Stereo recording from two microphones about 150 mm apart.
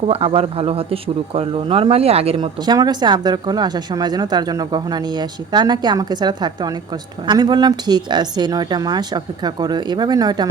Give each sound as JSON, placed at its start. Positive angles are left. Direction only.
{"t": 0.1, "sound": "a man's voice", "side_deg": -40}